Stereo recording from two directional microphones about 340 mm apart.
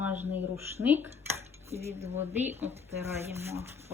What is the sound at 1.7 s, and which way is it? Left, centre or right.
Speech, centre.